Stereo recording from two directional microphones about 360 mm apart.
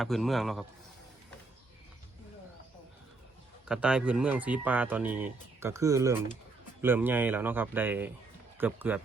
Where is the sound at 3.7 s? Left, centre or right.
Centre.